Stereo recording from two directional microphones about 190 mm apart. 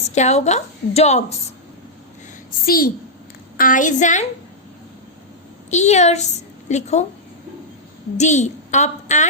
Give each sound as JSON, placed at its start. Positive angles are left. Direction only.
{"t": 0.1, "sound": "a woman's voice", "side_deg": 35}
{"t": 2.6, "sound": "a woman's voice", "side_deg": 50}
{"t": 5.7, "sound": "a woman's voice", "side_deg": 35}
{"t": 8.2, "sound": "a woman's voice", "side_deg": 40}